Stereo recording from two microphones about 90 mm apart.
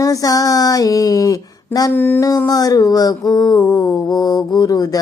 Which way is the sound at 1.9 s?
25° left (ahead or behind).